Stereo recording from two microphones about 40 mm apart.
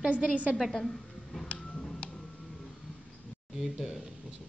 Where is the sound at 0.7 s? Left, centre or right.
Centre.